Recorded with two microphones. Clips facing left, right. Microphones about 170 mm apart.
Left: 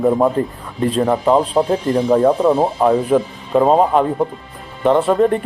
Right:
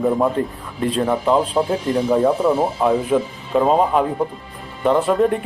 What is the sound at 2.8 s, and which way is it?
Speech, centre (ahead or behind).